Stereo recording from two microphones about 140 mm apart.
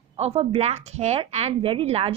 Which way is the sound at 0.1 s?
45° right (ahead or behind).